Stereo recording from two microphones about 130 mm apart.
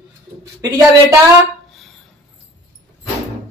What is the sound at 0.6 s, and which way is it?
Speech, 25° right (ahead or behind).